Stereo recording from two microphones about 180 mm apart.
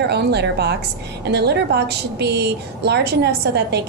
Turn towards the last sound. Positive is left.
turn(degrees=-65)  # may be behind; listen again after turning